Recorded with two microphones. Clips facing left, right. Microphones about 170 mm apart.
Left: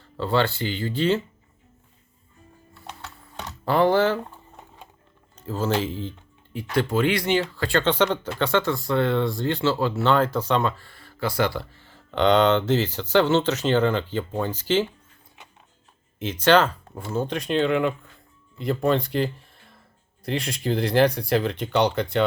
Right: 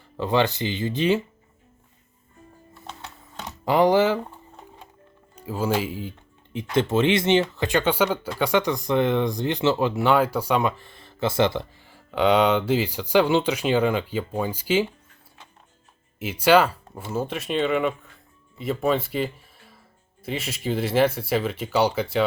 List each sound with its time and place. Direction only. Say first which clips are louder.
0.0 s speech: right 1 dB; 15° right (ahead or behind)
3.4 s speech: right 1 dB; 15° right (ahead or behind)
5.4 s speech: even; 10° right (ahead or behind)
6.5 s speech: right 2 dB; 20° right (ahead or behind)
16.1 s speech: right 1 dB; 10° right (ahead or behind)